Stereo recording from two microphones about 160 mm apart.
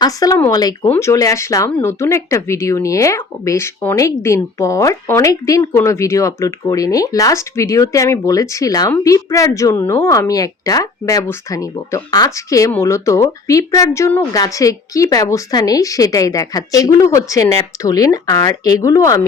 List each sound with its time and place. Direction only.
0.0 s a woman's voice: 20° left (ahead or behind)